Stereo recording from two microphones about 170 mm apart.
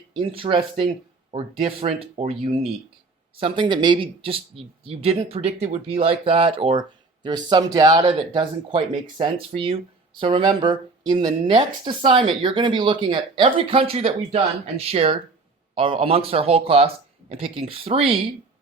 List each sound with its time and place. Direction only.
0.2 s speech: 30° right (ahead or behind)
3.4 s speech: 30° right (ahead or behind)